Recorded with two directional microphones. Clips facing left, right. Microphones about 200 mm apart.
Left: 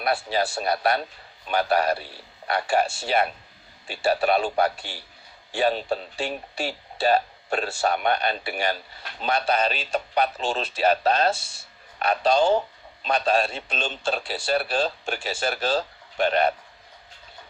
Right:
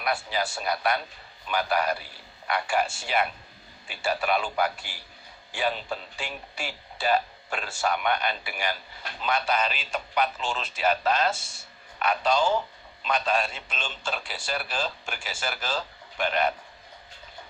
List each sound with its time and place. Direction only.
0.0 s speech: 30° left (ahead or behind)